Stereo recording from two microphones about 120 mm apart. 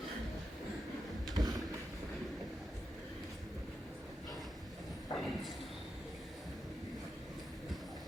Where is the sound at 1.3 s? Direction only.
30° right (ahead or behind).